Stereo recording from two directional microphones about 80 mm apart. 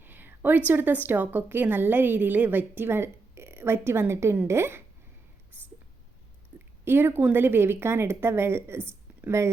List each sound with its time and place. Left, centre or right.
0.0 s a woman's voice: right
6.5 s a sound: centre
6.8 s speech: right